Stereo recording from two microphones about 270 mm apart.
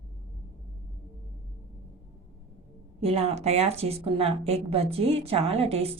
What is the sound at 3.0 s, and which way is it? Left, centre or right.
A woman's voice, right.